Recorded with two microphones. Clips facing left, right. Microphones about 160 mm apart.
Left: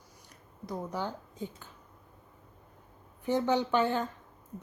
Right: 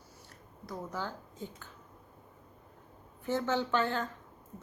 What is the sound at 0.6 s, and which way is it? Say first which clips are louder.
A woman's voice: left 4 dB; 15° left (ahead or behind).